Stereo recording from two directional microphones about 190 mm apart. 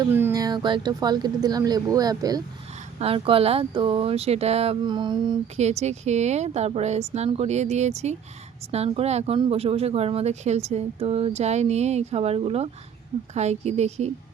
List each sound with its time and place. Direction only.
0.0 s speech: 10° right (ahead or behind)
3.0 s speech: 30° right (ahead or behind)